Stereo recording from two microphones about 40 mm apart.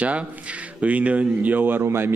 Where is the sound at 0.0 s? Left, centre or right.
Right.